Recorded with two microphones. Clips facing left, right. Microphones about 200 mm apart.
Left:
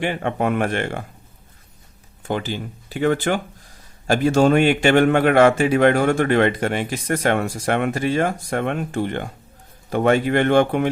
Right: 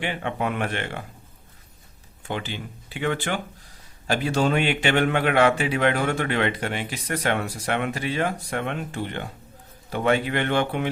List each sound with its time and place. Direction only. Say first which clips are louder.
0.0 s a man's voice: left 5 dB; 45° left (ahead or behind)
2.2 s a man's voice: left 6 dB; 40° left (ahead or behind)